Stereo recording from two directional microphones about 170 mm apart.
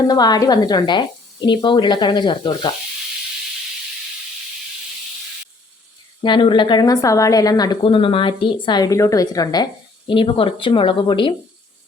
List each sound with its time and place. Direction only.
0.1 s a woman's voice: 25° left (ahead or behind)
6.2 s a woman's voice: 30° left (ahead or behind)